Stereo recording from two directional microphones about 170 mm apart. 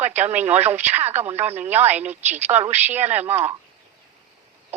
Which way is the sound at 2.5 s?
40° right (ahead or behind).